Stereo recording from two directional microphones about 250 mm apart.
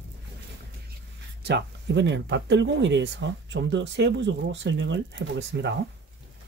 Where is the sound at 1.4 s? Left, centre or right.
Right.